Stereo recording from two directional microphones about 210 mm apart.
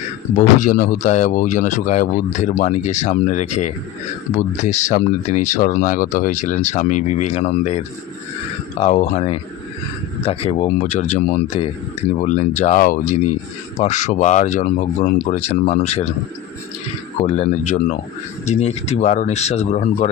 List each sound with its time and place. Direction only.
0.3 s speech: 40° left (ahead or behind)
17.2 s speech: 30° left (ahead or behind)